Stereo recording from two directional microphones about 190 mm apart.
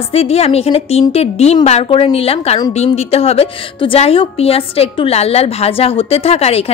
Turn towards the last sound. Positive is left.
turn(degrees=30)  # may be behind; listen again after turning